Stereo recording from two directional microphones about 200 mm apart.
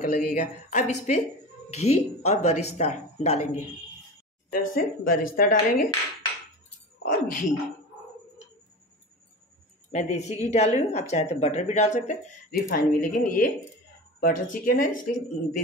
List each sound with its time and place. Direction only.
0.0 s speech: 35° left (ahead or behind)
4.5 s a woman's voice: 45° left (ahead or behind)
7.0 s speech: 45° left (ahead or behind)
9.8 s a woman's voice: 35° left (ahead or behind)